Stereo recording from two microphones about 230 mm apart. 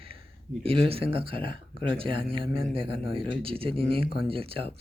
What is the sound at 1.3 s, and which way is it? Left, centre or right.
Speech, left.